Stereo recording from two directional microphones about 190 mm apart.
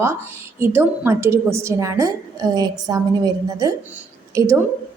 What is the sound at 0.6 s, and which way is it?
A woman's voice, 10° right (ahead or behind).